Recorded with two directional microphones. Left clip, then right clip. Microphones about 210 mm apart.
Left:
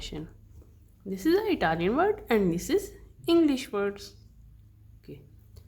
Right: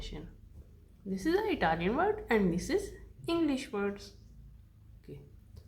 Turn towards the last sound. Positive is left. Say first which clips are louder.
# left 3 dB
turn(degrees=35)  # may be behind; listen again after turning